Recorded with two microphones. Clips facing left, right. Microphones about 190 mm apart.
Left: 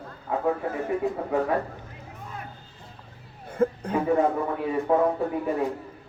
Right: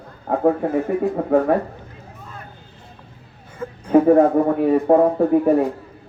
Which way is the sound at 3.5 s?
55° left (ahead or behind).